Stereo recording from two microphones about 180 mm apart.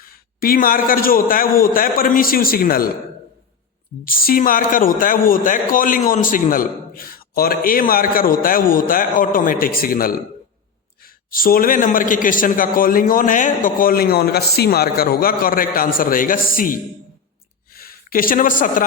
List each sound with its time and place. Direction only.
0.0 s a man's voice: 55° left (ahead or behind)
4.0 s a man's voice: 55° left (ahead or behind)
17.7 s speech: 55° left (ahead or behind)